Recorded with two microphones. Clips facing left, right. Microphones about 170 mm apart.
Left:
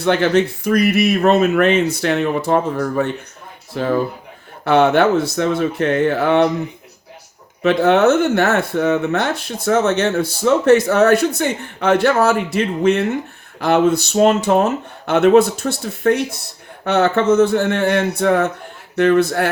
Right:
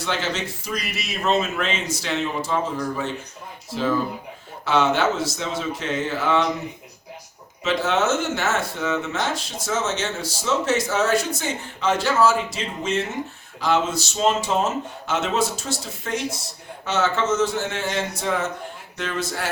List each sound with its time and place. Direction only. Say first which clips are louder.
0.0 s speech: left 12 dB; 60° left (ahead or behind)
7.6 s speech: left 9 dB; 60° left (ahead or behind)